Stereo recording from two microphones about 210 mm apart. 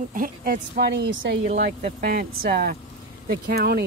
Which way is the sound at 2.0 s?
45° right (ahead or behind).